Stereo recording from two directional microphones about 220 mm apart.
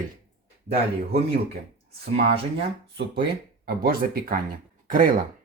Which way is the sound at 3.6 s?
45° right (ahead or behind).